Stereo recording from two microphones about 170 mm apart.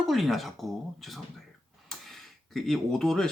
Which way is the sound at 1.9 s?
Centre (ahead or behind).